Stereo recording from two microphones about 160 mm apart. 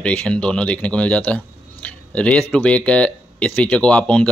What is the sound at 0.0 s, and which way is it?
Speech, 5° left (ahead or behind).